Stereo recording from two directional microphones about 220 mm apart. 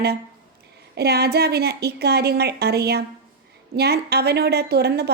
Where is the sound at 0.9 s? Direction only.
45° right (ahead or behind).